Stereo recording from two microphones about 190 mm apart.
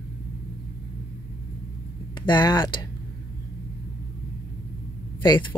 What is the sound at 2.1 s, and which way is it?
Speech, 20° left (ahead or behind).